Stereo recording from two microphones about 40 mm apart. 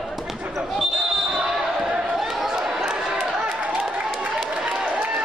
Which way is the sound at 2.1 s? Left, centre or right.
Centre.